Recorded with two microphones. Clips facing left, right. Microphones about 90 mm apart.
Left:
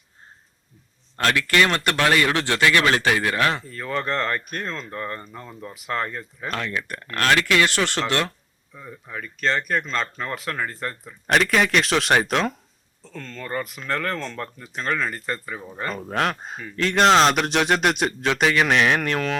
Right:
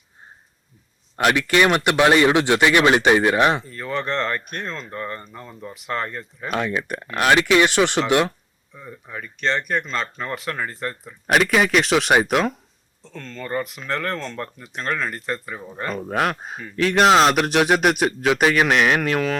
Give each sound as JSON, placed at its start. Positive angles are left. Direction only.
{"t": 1.1, "sound": "speech", "side_deg": -15}
{"t": 3.6, "sound": "speech", "side_deg": 0}
{"t": 6.5, "sound": "speech", "side_deg": -15}
{"t": 8.7, "sound": "speech", "side_deg": 0}